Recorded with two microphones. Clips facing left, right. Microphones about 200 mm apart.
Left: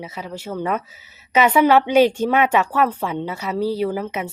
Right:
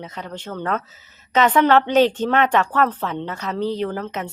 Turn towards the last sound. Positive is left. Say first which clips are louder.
# left 2 dB
turn(degrees=10)  # may be behind; listen again after turning